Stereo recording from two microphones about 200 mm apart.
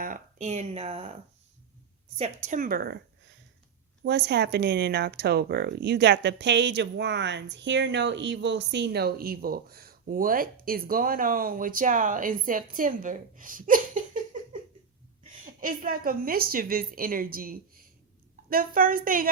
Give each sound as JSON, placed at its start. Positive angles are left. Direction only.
{"t": 0.0, "sound": "speech", "side_deg": -40}
{"t": 2.1, "sound": "a woman's voice", "side_deg": -35}
{"t": 4.0, "sound": "speech", "side_deg": -55}
{"t": 15.4, "sound": "speech", "side_deg": -45}